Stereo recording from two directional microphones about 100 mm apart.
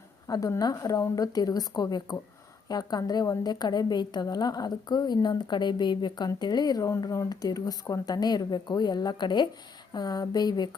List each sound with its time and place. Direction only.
0.3 s a woman's voice: 35° left (ahead or behind)